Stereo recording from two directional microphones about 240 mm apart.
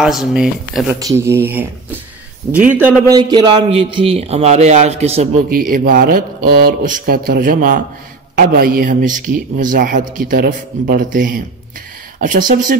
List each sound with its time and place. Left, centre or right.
0.0 s speech: centre
3.2 s a man's voice: centre; by 12.7 s right